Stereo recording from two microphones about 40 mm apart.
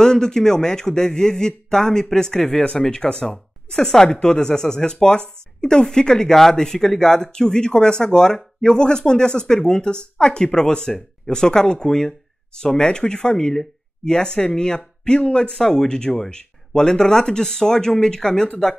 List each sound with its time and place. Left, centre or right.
0.0 s speech: centre
8.7 s speech: centre
15.5 s speech: centre